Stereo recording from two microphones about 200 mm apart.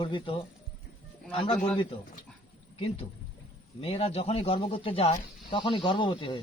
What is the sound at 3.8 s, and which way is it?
Speech, 30° left (ahead or behind).